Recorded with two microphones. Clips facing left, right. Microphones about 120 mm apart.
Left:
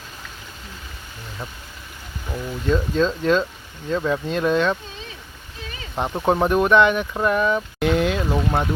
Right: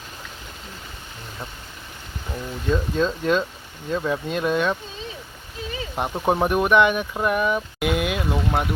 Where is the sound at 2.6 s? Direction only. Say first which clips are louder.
Left 2 dB; 15° right (ahead or behind).